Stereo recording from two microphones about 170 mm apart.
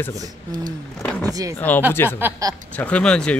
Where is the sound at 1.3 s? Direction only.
20° right (ahead or behind).